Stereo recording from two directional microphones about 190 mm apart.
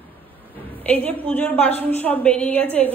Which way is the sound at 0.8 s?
10° left (ahead or behind).